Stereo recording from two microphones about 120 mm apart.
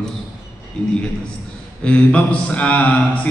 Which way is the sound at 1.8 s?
10° left (ahead or behind).